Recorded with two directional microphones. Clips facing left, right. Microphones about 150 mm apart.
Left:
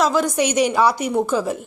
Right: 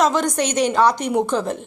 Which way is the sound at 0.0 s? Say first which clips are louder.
Even; 5° left (ahead or behind).